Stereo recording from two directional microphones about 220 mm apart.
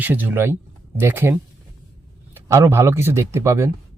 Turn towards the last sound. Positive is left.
turn(degrees=-10)  # may be behind; listen again after turning